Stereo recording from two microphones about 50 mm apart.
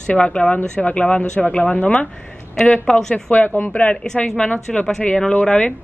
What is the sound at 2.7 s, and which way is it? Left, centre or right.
Speech, centre.